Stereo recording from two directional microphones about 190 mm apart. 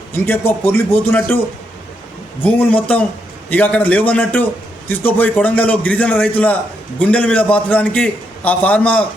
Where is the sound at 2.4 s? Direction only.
10° left (ahead or behind).